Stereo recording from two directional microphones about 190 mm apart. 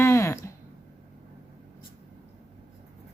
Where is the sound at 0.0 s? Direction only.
15° left (ahead or behind).